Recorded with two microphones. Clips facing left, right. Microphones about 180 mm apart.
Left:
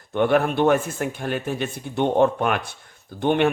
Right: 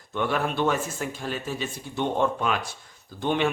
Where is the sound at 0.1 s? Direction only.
55° left (ahead or behind).